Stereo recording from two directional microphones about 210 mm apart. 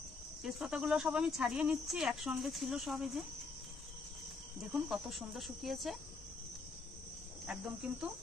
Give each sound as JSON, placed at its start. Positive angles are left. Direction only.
{"t": 0.4, "sound": "speech", "side_deg": -5}
{"t": 4.8, "sound": "speech", "side_deg": 0}
{"t": 7.4, "sound": "speech", "side_deg": -5}